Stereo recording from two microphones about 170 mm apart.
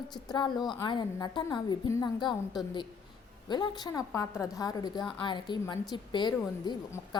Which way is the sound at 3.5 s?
25° left (ahead or behind).